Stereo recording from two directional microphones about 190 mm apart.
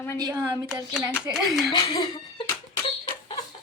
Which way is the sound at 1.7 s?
25° left (ahead or behind).